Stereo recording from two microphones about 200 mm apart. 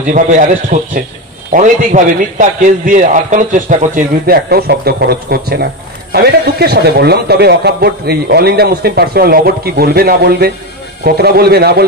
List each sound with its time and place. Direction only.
0.0 s a man's voice: 40° right (ahead or behind)